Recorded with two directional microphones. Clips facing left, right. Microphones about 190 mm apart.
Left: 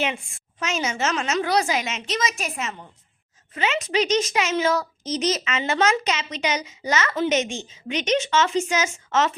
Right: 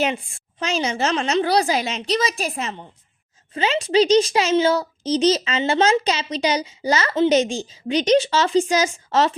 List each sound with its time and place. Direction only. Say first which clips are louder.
0.0 s a child's voice: right 4 dB; 35° right (ahead or behind)